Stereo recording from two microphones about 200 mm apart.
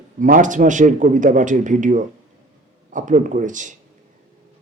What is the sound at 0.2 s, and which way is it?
A man's voice, 40° right (ahead or behind).